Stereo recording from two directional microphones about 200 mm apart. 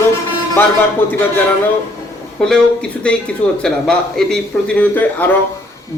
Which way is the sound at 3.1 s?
5° left (ahead or behind).